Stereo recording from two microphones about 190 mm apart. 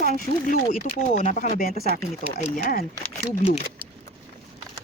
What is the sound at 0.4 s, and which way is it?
Speech, 45° left (ahead or behind).